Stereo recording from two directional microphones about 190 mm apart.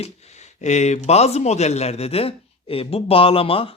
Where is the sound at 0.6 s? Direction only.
35° left (ahead or behind).